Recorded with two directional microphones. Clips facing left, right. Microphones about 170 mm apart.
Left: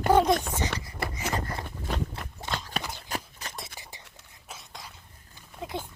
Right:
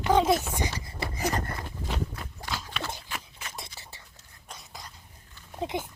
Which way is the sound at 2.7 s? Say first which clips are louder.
Left 2 dB; 40° left (ahead or behind).